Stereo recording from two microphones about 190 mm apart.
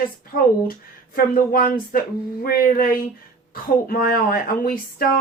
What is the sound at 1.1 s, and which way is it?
Speech, 50° left (ahead or behind).